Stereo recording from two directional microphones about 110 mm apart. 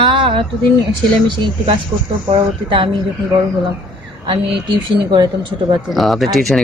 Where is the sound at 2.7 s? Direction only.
50° right (ahead or behind).